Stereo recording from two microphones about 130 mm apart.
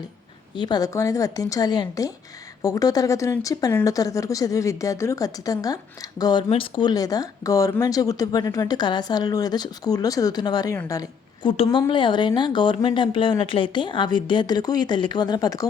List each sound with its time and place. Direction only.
0.5 s speech: 35° left (ahead or behind)
6.5 s speech: 40° left (ahead or behind)
11.4 s a woman's voice: 40° left (ahead or behind)